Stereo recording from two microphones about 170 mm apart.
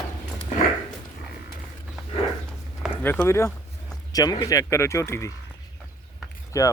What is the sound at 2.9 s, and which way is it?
Speech, 10° left (ahead or behind).